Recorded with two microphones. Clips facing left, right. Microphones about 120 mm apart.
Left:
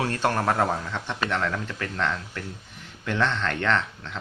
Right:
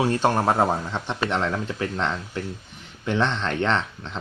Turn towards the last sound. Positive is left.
turn(degrees=-25)  # may be behind; listen again after turning